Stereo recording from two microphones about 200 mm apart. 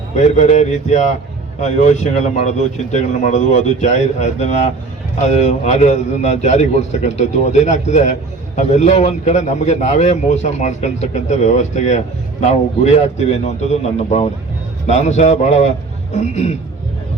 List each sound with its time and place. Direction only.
0.2 s a man's voice: 35° left (ahead or behind)